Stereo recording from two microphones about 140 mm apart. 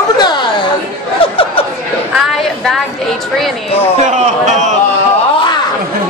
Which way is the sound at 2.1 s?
5° right (ahead or behind).